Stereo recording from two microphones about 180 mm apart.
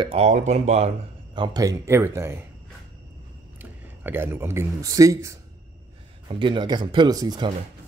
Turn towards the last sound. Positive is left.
turn(degrees=-20)  # may be behind; listen again after turning